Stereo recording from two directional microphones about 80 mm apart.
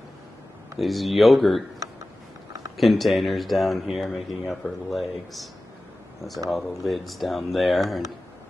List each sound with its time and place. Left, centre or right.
0.7 s speech: centre
2.8 s speech: centre
6.5 s speech: centre